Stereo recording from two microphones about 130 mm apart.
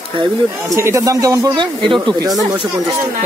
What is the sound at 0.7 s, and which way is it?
Speech, 20° right (ahead or behind).